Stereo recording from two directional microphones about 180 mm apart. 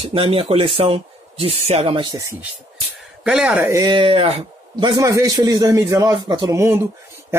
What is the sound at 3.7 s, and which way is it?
A man's voice, 25° right (ahead or behind).